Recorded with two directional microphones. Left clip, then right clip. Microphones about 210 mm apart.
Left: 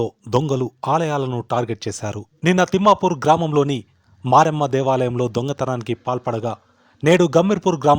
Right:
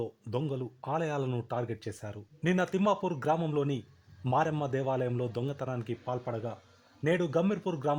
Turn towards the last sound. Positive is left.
turn(degrees=40)  # may be behind; listen again after turning